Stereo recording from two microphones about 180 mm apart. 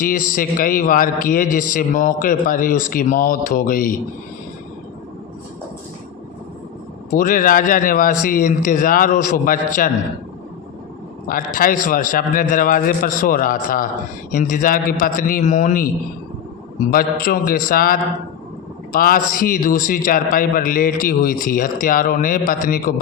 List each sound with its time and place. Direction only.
0.0 s a man's voice: 50° left (ahead or behind)
7.1 s a man's voice: 50° left (ahead or behind)
11.3 s a man's voice: 50° left (ahead or behind)
16.9 s a man's voice: 55° left (ahead or behind)